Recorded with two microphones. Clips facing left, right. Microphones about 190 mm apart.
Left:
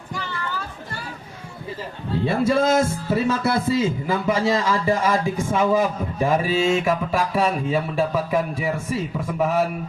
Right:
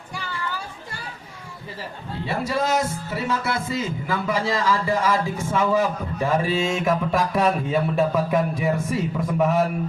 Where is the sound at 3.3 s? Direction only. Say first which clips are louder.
Left 2 dB; 40° left (ahead or behind).